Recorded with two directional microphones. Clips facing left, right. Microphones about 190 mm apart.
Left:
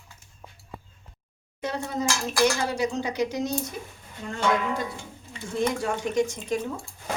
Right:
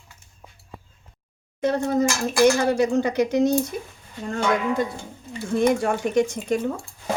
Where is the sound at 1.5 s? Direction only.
50° right (ahead or behind).